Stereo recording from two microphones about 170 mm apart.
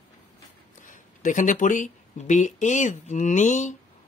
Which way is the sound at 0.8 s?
50° left (ahead or behind).